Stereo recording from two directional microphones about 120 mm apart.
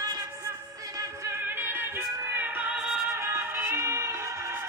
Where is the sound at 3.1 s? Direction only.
20° right (ahead or behind).